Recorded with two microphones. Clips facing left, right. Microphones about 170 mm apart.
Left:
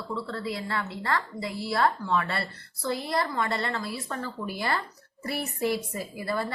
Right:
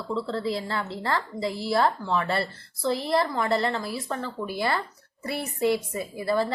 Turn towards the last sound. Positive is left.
turn(degrees=-25)  # may be behind; listen again after turning